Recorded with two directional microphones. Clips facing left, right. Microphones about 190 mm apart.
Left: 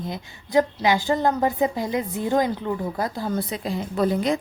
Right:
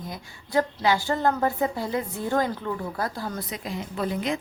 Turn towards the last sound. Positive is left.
turn(degrees=35)  # may be behind; listen again after turning